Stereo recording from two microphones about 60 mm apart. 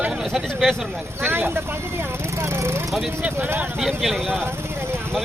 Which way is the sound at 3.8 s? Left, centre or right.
Centre.